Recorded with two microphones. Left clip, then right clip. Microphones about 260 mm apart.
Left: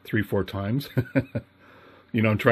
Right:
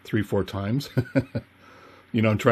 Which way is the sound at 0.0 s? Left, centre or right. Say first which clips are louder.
Even; centre.